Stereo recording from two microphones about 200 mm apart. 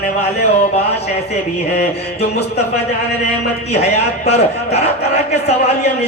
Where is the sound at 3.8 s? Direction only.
30° left (ahead or behind).